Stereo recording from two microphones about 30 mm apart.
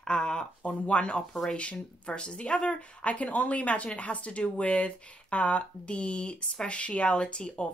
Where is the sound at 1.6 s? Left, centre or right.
Left.